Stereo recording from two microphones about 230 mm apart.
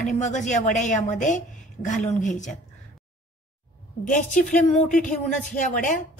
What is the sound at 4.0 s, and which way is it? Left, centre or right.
Speech, left.